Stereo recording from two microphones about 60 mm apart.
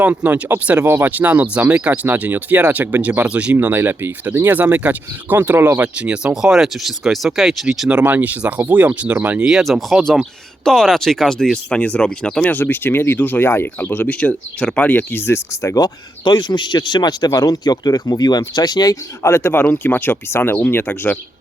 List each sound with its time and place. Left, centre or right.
0.0 s speech: right; by 7.9 s centre
8.0 s speech: right
9.4 s speech: centre
11.8 s speech: centre
12.5 s speech: left
14.2 s speech: centre
15.1 s speech: left
15.6 s speech: left
19.2 s speech: left
19.5 s speech: left